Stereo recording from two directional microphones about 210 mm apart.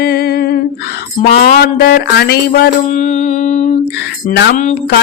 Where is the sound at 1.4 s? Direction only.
45° left (ahead or behind).